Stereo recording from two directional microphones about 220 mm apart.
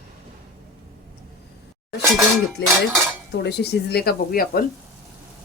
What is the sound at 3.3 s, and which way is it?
Speech, 50° left (ahead or behind).